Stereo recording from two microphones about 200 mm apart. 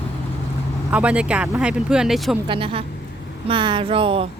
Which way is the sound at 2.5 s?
25° right (ahead or behind).